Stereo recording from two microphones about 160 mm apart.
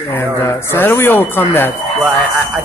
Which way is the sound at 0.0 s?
15° left (ahead or behind).